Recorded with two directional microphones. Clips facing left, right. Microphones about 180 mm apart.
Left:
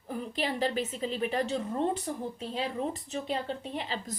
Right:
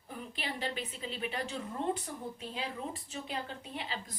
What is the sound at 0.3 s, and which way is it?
Speech, 40° left (ahead or behind).